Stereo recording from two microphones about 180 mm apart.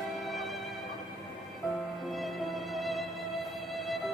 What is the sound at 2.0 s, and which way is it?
Music, centre (ahead or behind).